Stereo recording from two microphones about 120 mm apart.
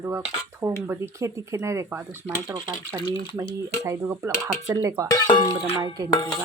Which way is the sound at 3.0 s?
40° left (ahead or behind).